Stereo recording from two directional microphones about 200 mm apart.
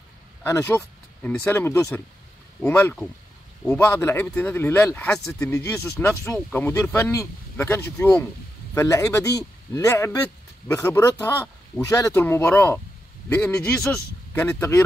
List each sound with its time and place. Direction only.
0.4 s speech: 10° left (ahead or behind)